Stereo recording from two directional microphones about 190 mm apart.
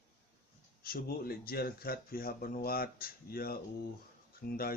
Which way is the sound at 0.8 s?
50° left (ahead or behind).